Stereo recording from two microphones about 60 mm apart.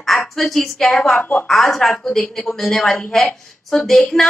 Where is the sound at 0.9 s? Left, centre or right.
Centre.